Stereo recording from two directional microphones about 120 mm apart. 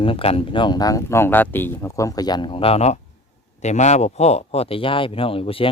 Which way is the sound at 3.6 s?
75° left (ahead or behind).